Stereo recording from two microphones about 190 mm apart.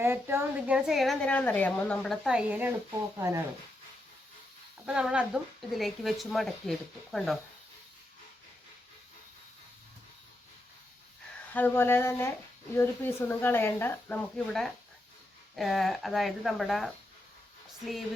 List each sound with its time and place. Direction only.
0.0 s a woman's voice: 15° right (ahead or behind)
4.9 s a woman's voice: 5° right (ahead or behind)
11.5 s a woman's voice: 10° left (ahead or behind)